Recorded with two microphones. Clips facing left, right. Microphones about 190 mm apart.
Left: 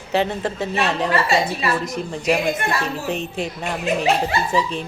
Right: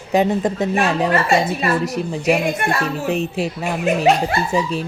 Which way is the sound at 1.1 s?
50° right (ahead or behind).